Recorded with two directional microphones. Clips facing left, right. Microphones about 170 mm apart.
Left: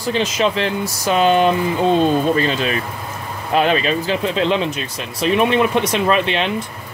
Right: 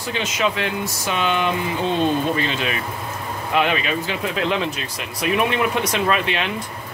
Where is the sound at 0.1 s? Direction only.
35° left (ahead or behind).